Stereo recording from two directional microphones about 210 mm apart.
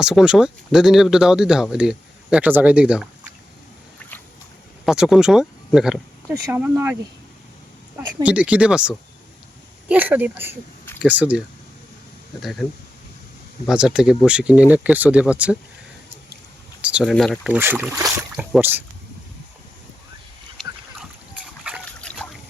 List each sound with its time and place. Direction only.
0.0 s speech: 5° right (ahead or behind)
4.9 s speech: centre (ahead or behind)
8.2 s speech: 5° right (ahead or behind)
13.7 s speech: 5° right (ahead or behind)
16.8 s speech: 5° right (ahead or behind)
20.6 s dog: 5° right (ahead or behind)